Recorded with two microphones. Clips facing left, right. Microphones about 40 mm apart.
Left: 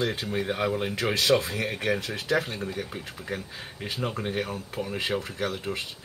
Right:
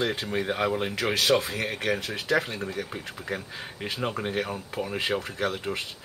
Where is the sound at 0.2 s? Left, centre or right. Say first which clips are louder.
Right 1 dB; centre.